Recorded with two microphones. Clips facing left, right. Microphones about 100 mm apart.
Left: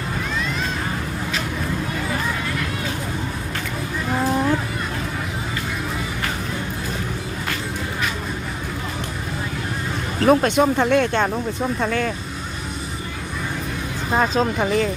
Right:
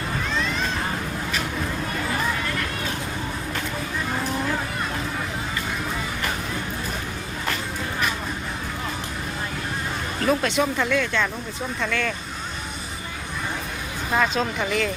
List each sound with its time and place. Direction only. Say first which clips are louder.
10.2 s speech: left 6 dB; 45° left (ahead or behind)
11.8 s speech: left 2 dB; 35° left (ahead or behind)
14.1 s speech: left 3 dB; 35° left (ahead or behind)